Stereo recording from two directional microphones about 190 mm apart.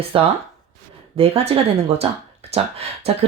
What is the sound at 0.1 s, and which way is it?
Speech, 30° right (ahead or behind).